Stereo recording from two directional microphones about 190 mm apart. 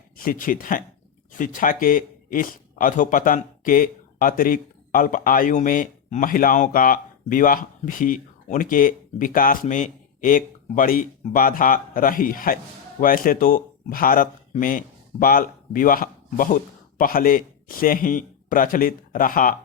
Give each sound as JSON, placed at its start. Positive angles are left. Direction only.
{"t": 0.2, "sound": "a man's voice", "side_deg": 45}